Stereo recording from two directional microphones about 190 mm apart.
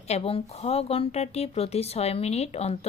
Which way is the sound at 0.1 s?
30° left (ahead or behind).